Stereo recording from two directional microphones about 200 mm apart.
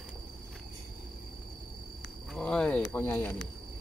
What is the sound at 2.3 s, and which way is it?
Speech, 5° left (ahead or behind).